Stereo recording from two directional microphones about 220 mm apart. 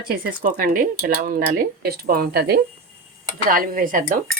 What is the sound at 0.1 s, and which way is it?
Speech, 40° right (ahead or behind).